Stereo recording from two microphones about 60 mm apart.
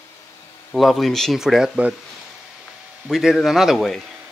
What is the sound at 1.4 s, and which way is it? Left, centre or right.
Speech, centre.